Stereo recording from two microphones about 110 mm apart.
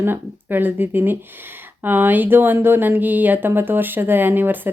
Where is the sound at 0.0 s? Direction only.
20° right (ahead or behind).